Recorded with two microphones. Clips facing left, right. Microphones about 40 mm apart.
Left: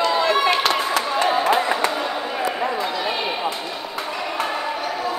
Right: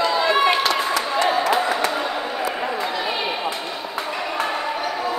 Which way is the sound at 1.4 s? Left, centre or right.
Left.